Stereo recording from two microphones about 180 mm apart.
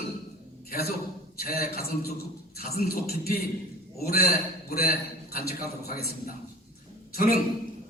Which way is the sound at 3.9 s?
60° left (ahead or behind).